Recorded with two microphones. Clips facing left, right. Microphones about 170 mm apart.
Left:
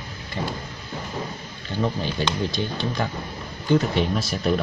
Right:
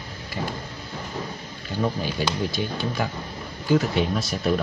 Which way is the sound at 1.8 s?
5° right (ahead or behind).